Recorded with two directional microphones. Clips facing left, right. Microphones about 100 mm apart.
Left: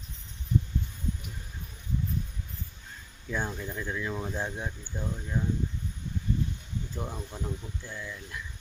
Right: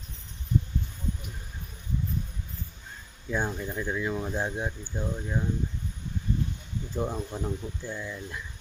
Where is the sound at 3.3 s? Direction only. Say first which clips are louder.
Right 3 dB; 15° right (ahead or behind); by 5.4 s 30° right (ahead or behind).